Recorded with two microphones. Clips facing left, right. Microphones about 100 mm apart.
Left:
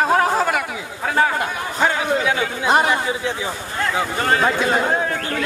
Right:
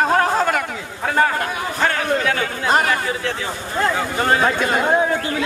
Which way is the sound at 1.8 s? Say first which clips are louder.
Left 1 dB; 10° left (ahead or behind).